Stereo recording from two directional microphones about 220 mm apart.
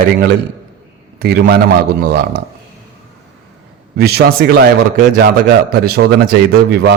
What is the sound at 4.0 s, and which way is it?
A man's voice, 45° right (ahead or behind).